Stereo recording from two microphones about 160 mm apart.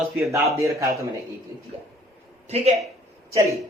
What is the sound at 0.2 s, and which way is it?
Speech, 20° right (ahead or behind).